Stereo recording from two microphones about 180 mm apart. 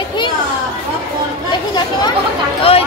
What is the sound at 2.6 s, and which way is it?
Speech, 35° left (ahead or behind).